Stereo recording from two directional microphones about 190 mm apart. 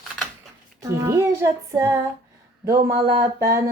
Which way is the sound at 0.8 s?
15° right (ahead or behind).